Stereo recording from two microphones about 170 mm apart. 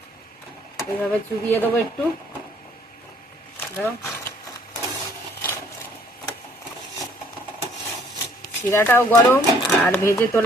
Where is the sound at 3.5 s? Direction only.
15° left (ahead or behind).